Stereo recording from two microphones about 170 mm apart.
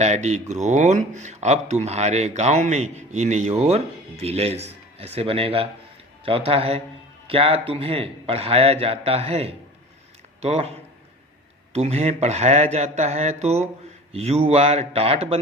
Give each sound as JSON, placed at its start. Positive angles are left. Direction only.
{"t": 0.0, "sound": "speech", "side_deg": -40}